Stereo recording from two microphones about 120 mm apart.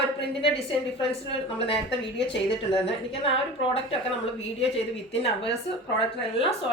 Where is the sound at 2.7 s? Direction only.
50° left (ahead or behind).